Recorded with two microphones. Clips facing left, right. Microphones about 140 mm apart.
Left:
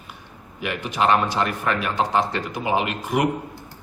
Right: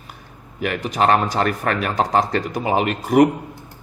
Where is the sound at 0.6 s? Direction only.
40° right (ahead or behind).